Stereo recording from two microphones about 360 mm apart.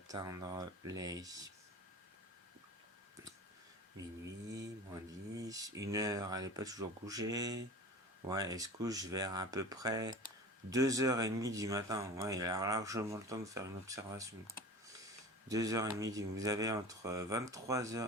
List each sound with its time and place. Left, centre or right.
0.1 s speech: centre
5.4 s speech: centre
15.4 s speech: centre